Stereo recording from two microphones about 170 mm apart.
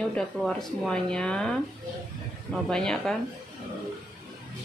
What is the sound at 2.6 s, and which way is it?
Speech, 5° left (ahead or behind).